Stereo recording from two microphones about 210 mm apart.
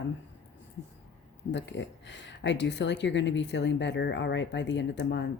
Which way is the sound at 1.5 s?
60° left (ahead or behind).